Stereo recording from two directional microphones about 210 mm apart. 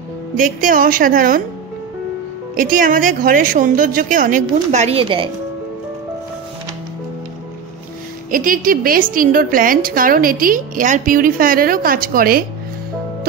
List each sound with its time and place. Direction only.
0.4 s a woman's voice: 40° right (ahead or behind)
2.5 s a woman's voice: 40° right (ahead or behind); by 5.3 s 25° right (ahead or behind)
8.3 s a woman's voice: 40° right (ahead or behind)